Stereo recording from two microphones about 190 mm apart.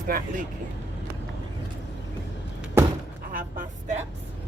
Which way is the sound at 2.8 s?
10° right (ahead or behind).